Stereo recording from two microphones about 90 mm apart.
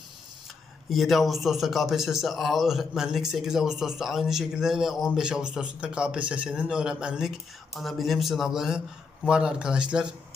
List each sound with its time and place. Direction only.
0.9 s a man's voice: centre (ahead or behind)